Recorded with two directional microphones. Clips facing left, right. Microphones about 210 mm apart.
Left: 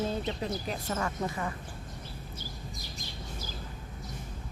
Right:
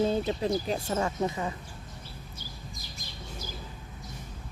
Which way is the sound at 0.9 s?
20° right (ahead or behind).